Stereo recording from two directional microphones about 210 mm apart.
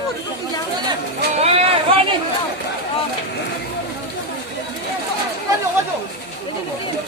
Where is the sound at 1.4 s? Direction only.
30° right (ahead or behind).